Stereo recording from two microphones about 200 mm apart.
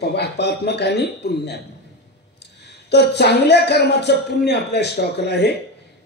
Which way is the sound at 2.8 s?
55° left (ahead or behind).